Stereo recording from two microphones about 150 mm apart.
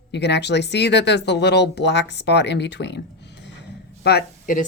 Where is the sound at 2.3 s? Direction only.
90° left.